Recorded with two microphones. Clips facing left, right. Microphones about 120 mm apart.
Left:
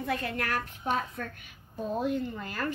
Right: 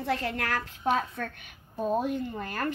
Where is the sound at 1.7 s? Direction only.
45° right (ahead or behind).